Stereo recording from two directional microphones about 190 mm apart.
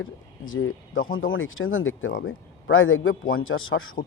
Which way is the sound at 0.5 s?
90° left.